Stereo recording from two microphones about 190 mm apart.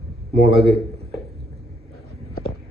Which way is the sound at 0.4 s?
30° right (ahead or behind).